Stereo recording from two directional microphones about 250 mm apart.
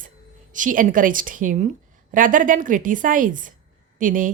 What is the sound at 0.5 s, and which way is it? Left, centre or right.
A woman's voice, right.